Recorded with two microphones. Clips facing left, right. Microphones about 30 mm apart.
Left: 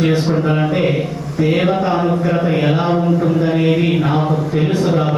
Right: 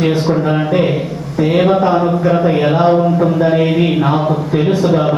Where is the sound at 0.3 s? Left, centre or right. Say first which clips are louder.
Right 2 dB; centre.